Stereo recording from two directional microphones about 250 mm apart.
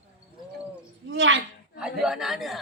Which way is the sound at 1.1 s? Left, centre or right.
Right.